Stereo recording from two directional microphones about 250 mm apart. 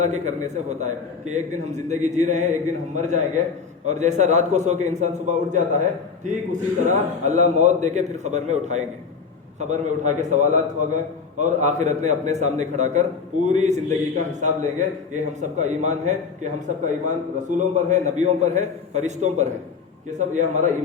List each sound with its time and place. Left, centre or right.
0.0 s a man's voice: right